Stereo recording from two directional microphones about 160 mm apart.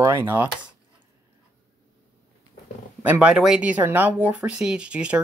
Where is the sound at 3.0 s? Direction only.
10° right (ahead or behind).